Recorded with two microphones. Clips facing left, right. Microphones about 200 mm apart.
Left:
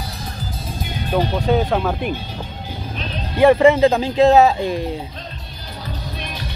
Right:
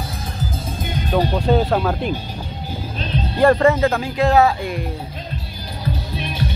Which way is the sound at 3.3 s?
10° left (ahead or behind).